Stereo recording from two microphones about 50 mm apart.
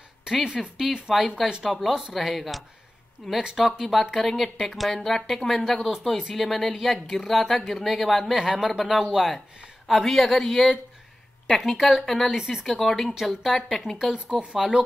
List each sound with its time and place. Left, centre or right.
0.3 s speech: centre
1.6 s speech: centre
14.4 s speech: centre